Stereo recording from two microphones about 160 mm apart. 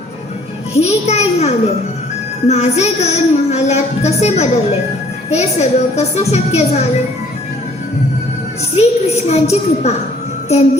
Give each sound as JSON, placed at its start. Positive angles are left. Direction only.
{"t": 0.7, "sound": "a woman's voice", "side_deg": 40}
{"t": 2.5, "sound": "music", "side_deg": 40}
{"t": 8.7, "sound": "a woman's voice", "side_deg": 40}